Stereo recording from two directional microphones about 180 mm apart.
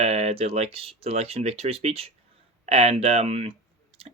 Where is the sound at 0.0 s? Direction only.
35° right (ahead or behind).